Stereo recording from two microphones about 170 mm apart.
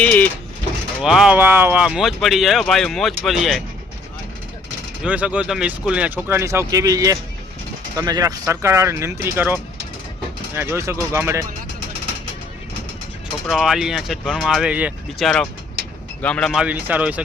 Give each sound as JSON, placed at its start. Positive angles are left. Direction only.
{"t": 0.0, "sound": "speech", "side_deg": 10}
{"t": 1.0, "sound": "speech", "side_deg": -5}
{"t": 5.0, "sound": "speech", "side_deg": -5}
{"t": 13.5, "sound": "speech", "side_deg": 0}
{"t": 16.2, "sound": "speech", "side_deg": 5}